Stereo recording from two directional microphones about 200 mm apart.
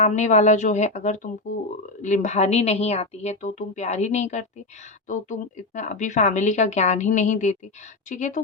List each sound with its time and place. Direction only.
0.0 s speech: 35° left (ahead or behind)